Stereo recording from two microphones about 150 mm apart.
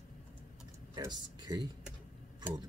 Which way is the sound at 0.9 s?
30° right (ahead or behind).